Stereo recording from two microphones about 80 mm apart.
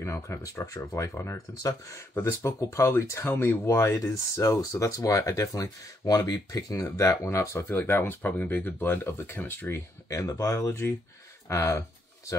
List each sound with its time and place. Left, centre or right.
0.0 s speech: left